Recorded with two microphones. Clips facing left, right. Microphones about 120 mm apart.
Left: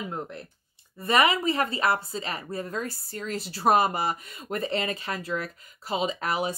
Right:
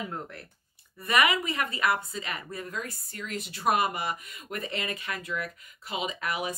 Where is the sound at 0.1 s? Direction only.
20° left (ahead or behind).